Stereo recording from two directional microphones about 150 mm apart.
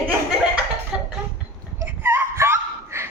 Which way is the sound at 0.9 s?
5° right (ahead or behind).